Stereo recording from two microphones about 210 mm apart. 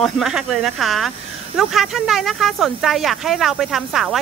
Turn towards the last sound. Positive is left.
turn(degrees=0)  # may be behind; listen again after turning